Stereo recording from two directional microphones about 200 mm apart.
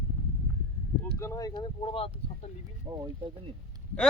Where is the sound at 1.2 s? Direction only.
15° left (ahead or behind).